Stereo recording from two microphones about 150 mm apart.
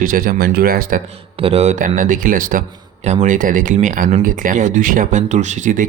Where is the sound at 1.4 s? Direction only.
45° right (ahead or behind); by 2.6 s 65° right (ahead or behind).